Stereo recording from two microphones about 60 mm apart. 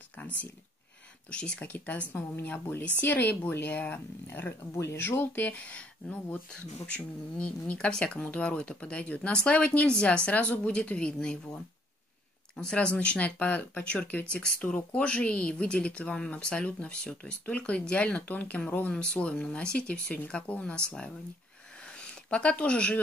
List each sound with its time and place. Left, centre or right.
1.3 s speech: centre; by 5.5 s left
5.5 s speech: left
12.5 s speech: centre
21.8 s a sound: centre